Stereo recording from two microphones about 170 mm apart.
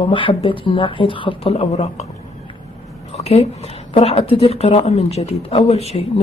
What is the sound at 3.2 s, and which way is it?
Speech, 40° left (ahead or behind).